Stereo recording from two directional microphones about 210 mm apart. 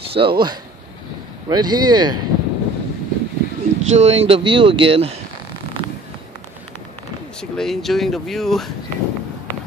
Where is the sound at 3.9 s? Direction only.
30° right (ahead or behind).